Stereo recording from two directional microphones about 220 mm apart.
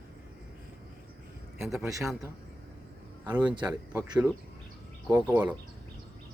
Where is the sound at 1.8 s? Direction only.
15° right (ahead or behind).